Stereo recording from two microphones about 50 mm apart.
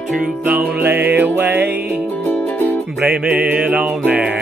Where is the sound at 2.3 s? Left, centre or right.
Left.